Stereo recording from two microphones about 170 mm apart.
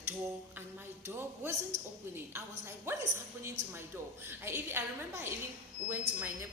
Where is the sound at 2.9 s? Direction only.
15° right (ahead or behind).